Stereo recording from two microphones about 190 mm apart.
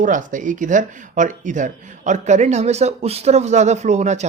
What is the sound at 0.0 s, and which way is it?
Speech, 45° right (ahead or behind).